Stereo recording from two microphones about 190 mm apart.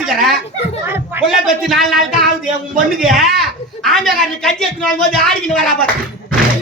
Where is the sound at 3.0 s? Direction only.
Centre (ahead or behind).